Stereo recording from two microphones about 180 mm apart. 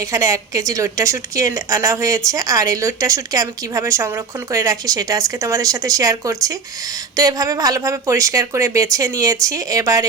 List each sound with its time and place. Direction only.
0.0 s a woman's voice: 20° right (ahead or behind)